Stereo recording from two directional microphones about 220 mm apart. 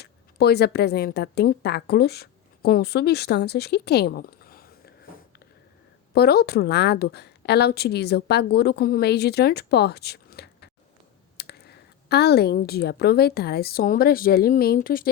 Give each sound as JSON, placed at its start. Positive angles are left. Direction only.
{"t": 0.0, "sound": "a woman's voice", "side_deg": 45}
{"t": 6.1, "sound": "a woman's voice", "side_deg": 45}